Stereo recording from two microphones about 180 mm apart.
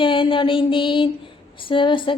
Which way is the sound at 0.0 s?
30° left (ahead or behind).